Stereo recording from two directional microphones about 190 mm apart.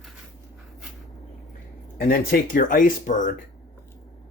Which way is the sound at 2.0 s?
50° left (ahead or behind).